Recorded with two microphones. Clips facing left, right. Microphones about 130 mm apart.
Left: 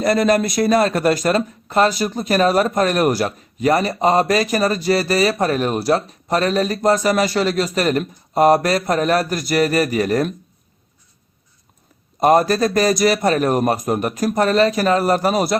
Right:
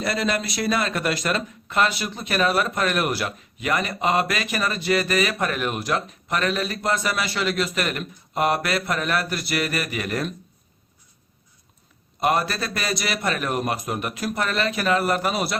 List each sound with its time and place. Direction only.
0.0 s speech: 45° left (ahead or behind)
12.2 s speech: 40° left (ahead or behind)